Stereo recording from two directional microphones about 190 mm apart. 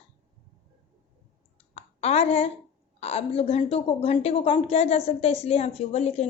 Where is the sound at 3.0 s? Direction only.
30° left (ahead or behind).